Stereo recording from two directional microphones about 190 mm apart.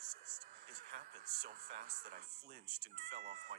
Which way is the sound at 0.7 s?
55° right (ahead or behind).